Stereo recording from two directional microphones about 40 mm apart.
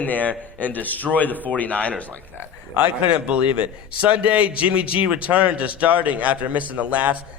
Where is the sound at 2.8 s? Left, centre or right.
Right.